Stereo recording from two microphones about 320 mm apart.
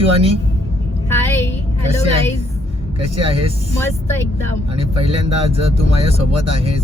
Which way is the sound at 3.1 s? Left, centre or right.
Centre.